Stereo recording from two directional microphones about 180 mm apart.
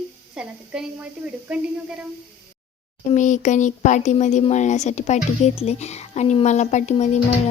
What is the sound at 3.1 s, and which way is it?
Speech, 45° left (ahead or behind).